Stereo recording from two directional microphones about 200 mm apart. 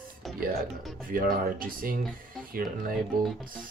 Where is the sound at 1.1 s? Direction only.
45° right (ahead or behind).